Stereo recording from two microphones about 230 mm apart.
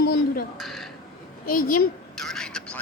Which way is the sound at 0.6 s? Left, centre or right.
Centre.